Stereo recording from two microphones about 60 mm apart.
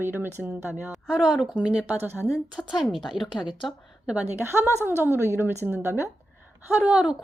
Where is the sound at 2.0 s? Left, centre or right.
Right.